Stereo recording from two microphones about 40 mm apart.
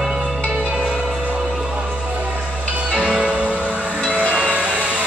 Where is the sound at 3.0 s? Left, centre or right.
Right.